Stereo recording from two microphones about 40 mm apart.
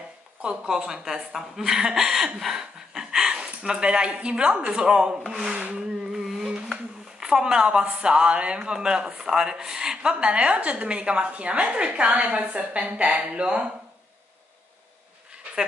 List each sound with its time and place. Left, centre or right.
0.4 s speech: right
5.7 s a sound: centre
8.0 s a woman's voice: right
10.2 s a woman's voice: right